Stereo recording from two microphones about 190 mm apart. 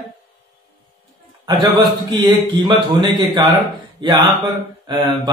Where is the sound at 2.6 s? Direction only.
25° right (ahead or behind).